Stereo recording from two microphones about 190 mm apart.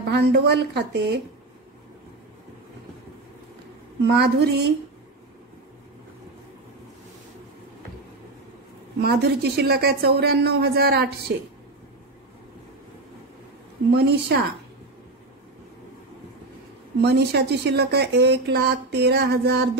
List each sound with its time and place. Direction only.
0.1 s speech: 60° right (ahead or behind)
4.0 s speech: 60° right (ahead or behind)
9.0 s speech: 55° right (ahead or behind)
14.0 s speech: 60° right (ahead or behind)
17.0 s speech: 60° right (ahead or behind)